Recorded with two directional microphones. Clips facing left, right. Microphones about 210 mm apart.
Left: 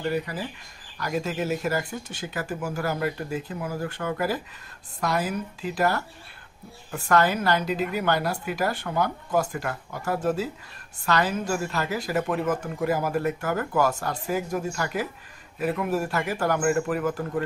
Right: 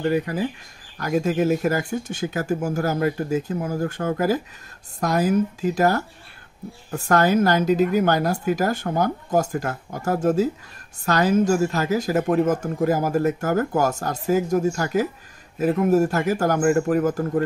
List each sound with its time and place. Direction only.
0.0 s speech: 50° right (ahead or behind)